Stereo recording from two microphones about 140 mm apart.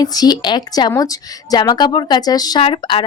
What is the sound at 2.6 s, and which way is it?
Speech, 40° left (ahead or behind).